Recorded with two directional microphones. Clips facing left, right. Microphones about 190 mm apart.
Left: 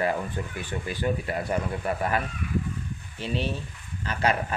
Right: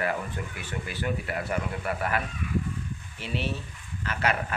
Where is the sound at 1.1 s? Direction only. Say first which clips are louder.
Left 3 dB; 30° left (ahead or behind).